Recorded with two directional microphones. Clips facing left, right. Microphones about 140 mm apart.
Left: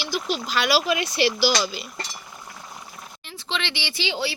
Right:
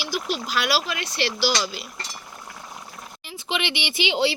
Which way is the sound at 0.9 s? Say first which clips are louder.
Left 5 dB; 10° left (ahead or behind).